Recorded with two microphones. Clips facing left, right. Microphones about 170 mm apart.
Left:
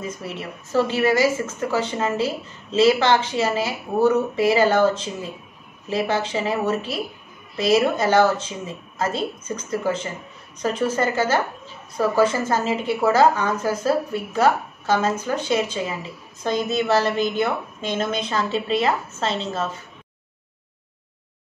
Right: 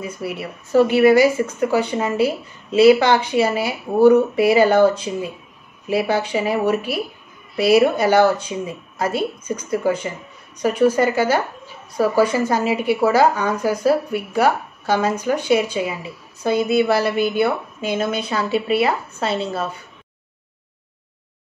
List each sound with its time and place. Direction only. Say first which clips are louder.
0.0 s speech: right 3 dB; 10° right (ahead or behind)